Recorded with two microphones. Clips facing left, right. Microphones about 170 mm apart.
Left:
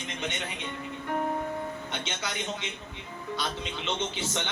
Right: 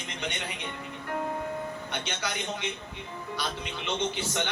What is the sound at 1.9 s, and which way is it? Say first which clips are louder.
A man's voice: right 1 dB; 20° left (ahead or behind).